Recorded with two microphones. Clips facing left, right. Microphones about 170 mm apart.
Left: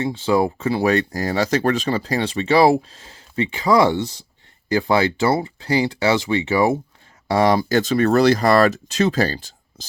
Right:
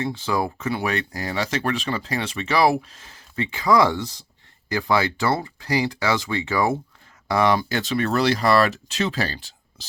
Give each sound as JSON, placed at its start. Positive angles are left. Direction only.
{"t": 0.0, "sound": "speech", "side_deg": 25}
{"t": 7.3, "sound": "speech", "side_deg": 35}